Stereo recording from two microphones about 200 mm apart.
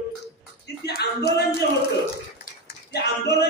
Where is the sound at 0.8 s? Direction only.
50° left (ahead or behind).